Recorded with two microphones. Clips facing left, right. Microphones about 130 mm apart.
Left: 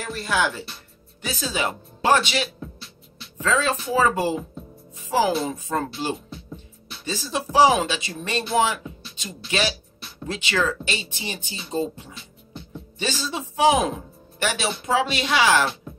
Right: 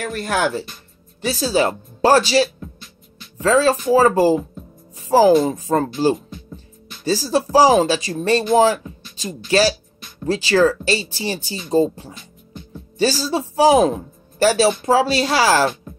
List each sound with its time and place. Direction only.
0.0 s speech: 50° right (ahead or behind)
1.2 s speech: 35° right (ahead or behind)